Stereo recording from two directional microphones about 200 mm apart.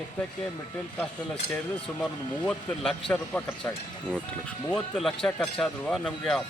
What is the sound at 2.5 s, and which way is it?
Speech, 5° left (ahead or behind).